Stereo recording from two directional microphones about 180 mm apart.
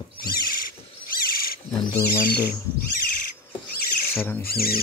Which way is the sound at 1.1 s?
55° left (ahead or behind).